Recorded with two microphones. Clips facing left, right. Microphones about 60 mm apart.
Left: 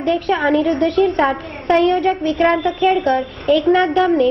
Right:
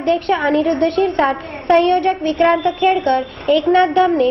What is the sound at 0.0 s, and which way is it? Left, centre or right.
A woman's voice, centre.